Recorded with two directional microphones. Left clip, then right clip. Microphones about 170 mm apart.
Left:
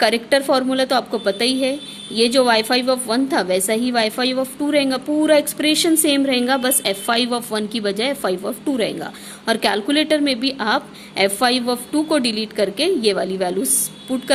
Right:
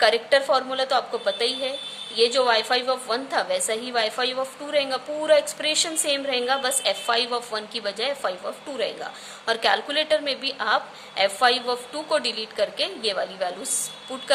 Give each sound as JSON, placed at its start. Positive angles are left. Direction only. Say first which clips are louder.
{"t": 0.0, "sound": "a woman's voice", "louder": "left 2 dB", "side_deg": 45}